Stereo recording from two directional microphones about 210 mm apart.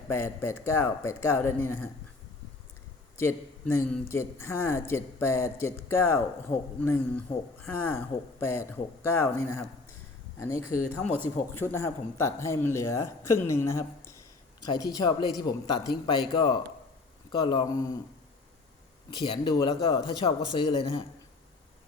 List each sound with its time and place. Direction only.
0.1 s speech: 10° left (ahead or behind)
3.2 s a woman's voice: 10° left (ahead or behind)
19.1 s a man's voice: 20° left (ahead or behind)